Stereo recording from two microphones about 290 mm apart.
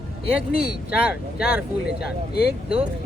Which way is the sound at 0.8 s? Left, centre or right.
Centre.